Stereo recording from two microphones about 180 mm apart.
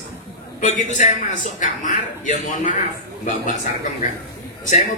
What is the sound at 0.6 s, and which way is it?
A man's voice, 45° left (ahead or behind).